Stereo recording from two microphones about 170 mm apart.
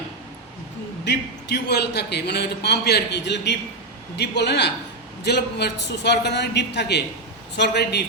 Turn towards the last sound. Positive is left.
turn(degrees=75)  # may be behind; listen again after turning